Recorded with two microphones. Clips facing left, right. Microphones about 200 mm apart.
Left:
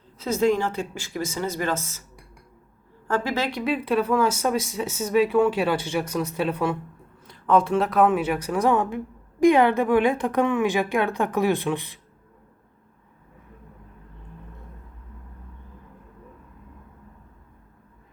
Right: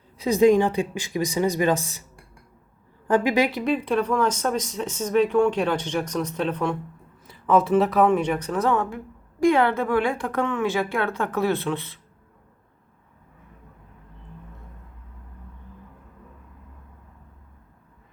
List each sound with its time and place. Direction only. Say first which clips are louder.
0.2 s speech: right 5 dB; 15° right (ahead or behind)
3.1 s speech: right 5 dB; 15° right (ahead or behind)
3.6 s speech: even; 5° left (ahead or behind)